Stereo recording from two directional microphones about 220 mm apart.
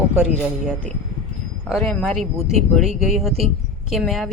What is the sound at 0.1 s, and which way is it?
A man's voice, 5° right (ahead or behind).